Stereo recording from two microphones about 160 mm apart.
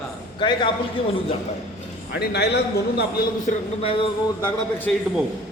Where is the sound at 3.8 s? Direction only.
35° left (ahead or behind).